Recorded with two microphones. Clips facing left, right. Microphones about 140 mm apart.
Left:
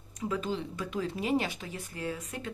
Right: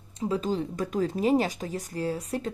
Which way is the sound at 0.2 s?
35° right (ahead or behind).